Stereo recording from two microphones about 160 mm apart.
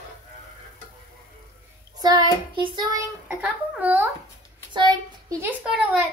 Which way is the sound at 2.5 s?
30° right (ahead or behind).